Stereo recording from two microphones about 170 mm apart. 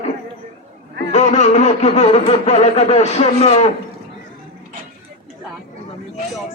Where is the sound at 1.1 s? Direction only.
45° left (ahead or behind).